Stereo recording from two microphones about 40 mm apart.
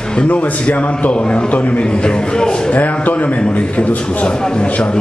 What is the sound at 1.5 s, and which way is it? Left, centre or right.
Speech, left.